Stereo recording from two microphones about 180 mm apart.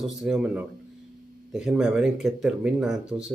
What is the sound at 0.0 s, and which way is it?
Speech, centre (ahead or behind).